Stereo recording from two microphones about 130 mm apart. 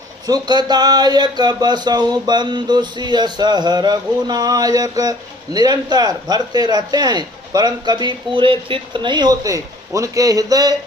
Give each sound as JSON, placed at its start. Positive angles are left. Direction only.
{"t": 0.3, "sound": "speech", "side_deg": -35}